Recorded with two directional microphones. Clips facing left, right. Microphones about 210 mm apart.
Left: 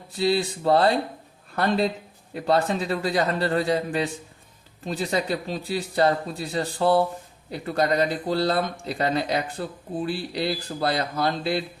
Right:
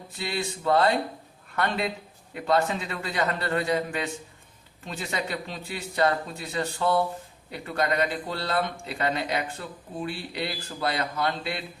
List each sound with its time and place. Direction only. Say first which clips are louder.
0.2 s speech: left 8 dB; 35° left (ahead or behind)